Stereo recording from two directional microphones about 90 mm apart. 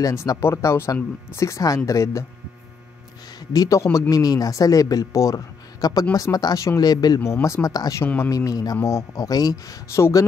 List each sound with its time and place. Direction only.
0.0 s speech: 35° left (ahead or behind)
3.5 s speech: 35° left (ahead or behind)
7.4 s speech: 30° left (ahead or behind)
7.7 s speech: 45° left (ahead or behind)